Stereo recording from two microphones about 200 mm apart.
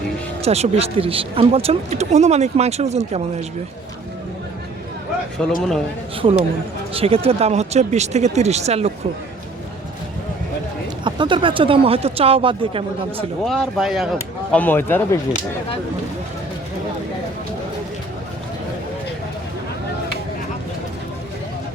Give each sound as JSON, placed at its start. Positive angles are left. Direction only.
{"t": 0.4, "sound": "speech", "side_deg": -30}
{"t": 5.4, "sound": "speech", "side_deg": 5}
{"t": 6.9, "sound": "speech", "side_deg": -30}
{"t": 11.0, "sound": "speech", "side_deg": -25}
{"t": 13.4, "sound": "speech", "side_deg": 0}